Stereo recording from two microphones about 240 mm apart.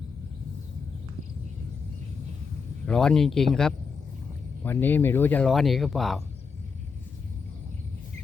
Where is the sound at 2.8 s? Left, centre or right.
Centre.